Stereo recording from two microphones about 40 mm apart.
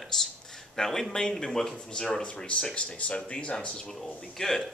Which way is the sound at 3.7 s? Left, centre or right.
Centre.